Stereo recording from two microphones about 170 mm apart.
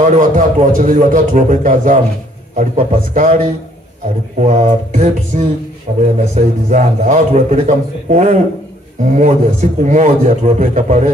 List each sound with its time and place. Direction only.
0.0 s a man's voice: 50° right (ahead or behind)
4.4 s a man's voice: 45° right (ahead or behind)